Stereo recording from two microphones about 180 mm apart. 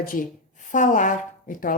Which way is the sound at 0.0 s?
50° left (ahead or behind).